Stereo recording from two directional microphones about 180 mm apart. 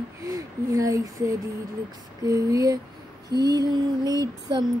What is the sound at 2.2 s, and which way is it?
Female singing, 20° right (ahead or behind).